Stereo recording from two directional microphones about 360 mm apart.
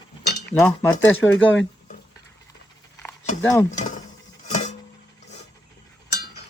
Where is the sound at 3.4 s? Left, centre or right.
Centre.